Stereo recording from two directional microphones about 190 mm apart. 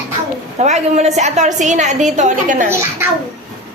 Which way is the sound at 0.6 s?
35° right (ahead or behind).